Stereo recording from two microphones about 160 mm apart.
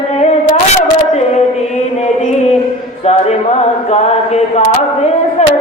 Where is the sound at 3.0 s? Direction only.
40° left (ahead or behind).